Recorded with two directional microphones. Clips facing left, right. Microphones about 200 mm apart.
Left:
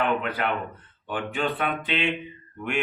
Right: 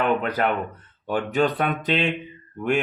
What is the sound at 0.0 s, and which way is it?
Speech, 40° right (ahead or behind).